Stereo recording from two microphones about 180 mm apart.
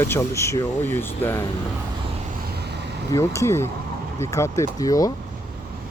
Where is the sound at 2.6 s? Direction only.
70° right (ahead or behind).